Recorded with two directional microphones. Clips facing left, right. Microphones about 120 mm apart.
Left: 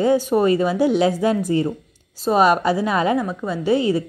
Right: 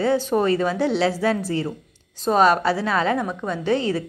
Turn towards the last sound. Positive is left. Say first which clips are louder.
# left 3 dB
turn(degrees=10)  # may be behind; listen again after turning